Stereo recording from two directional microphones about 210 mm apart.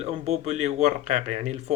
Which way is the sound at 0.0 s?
30° right (ahead or behind).